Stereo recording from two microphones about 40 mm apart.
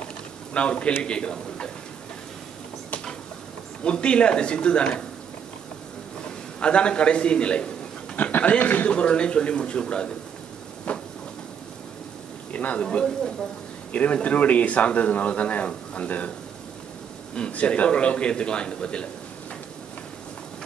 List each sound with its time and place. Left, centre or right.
0.5 s a man's voice: left
3.8 s a man's voice: left
6.6 s a man's voice: left
8.4 s a man's voice: left
10.9 s vehicle: left
12.5 s a man's voice: left
12.8 s a man's voice: left
13.9 s speech: left
17.5 s a man's voice: left